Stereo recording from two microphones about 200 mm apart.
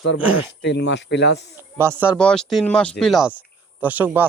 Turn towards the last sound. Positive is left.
turn(degrees=-10)  # may be behind; listen again after turning